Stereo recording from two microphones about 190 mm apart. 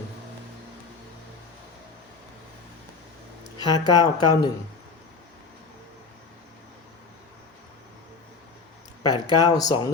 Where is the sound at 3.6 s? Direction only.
20° left (ahead or behind).